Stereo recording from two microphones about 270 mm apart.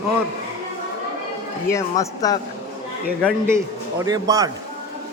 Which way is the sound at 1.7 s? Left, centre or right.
Centre.